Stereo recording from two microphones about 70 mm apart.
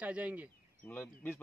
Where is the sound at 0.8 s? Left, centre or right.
Left.